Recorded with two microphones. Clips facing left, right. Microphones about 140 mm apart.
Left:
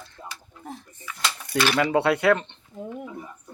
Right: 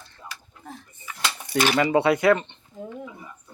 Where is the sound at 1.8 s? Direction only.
Centre (ahead or behind).